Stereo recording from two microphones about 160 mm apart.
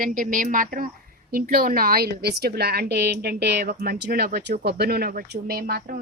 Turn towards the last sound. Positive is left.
turn(degrees=-70)  # may be behind; listen again after turning